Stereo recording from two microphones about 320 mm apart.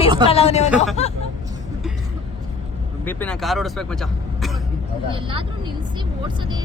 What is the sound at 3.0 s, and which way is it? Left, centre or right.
Speech, centre.